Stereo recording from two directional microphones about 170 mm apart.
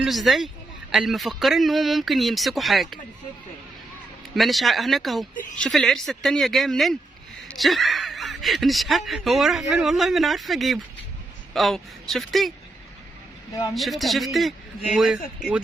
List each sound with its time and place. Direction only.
0.0 s speech: centre (ahead or behind)
4.4 s speech: centre (ahead or behind)
13.5 s speech: 20° left (ahead or behind)
13.7 s speech: centre (ahead or behind)